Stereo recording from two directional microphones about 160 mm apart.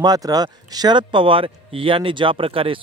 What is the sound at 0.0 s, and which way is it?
Speech, 25° right (ahead or behind).